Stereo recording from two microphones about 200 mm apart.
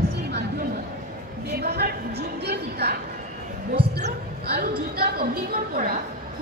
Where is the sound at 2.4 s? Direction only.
55° right (ahead or behind).